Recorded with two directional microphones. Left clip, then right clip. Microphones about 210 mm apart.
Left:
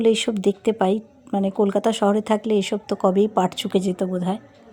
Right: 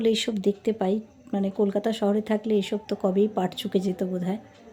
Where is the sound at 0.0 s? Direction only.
20° left (ahead or behind).